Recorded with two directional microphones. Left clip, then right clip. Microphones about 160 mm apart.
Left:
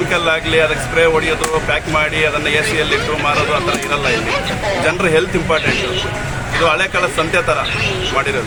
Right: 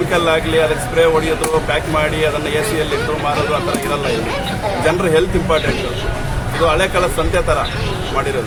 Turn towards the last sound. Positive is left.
turn(degrees=-10)  # may be behind; listen again after turning